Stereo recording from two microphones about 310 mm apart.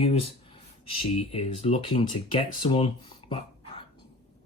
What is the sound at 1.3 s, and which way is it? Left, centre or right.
Speech, centre.